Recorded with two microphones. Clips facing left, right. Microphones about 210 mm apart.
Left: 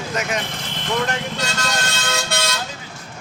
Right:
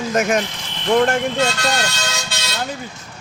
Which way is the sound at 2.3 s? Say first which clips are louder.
Left 6 dB; 55° left (ahead or behind).